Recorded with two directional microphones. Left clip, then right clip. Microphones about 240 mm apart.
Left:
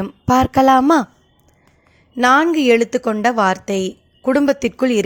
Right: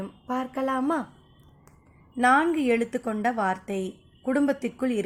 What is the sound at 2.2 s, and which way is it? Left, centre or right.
A woman's voice, left.